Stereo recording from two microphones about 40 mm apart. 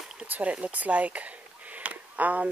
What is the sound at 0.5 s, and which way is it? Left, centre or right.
Speech, right.